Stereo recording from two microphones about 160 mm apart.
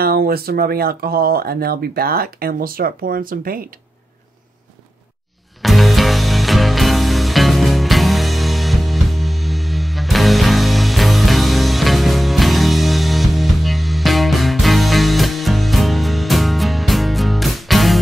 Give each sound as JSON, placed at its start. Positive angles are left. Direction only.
{"t": 0.0, "sound": "speech", "side_deg": -70}
{"t": 5.6, "sound": "music", "side_deg": 0}